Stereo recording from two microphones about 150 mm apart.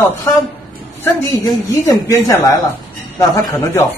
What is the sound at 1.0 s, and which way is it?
A woman's voice, 20° left (ahead or behind).